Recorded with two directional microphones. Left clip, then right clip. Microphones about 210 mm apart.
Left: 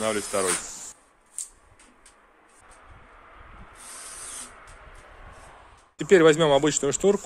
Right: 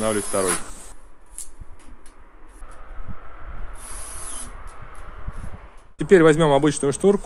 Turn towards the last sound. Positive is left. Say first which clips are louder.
# right 3 dB
turn(degrees=10)  # may be behind; listen again after turning